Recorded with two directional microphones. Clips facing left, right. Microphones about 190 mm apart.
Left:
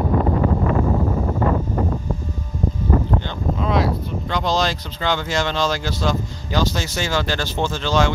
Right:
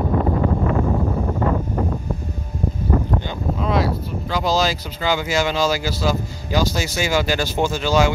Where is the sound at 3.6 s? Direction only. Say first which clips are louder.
Even; centre (ahead or behind).